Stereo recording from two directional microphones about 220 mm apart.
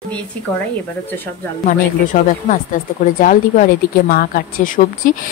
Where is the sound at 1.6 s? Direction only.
35° left (ahead or behind).